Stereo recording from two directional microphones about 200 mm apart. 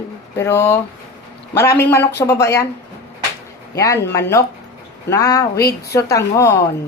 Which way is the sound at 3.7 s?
15° left (ahead or behind).